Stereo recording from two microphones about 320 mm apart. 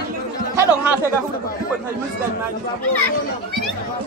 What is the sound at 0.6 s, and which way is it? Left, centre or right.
Chatter, centre.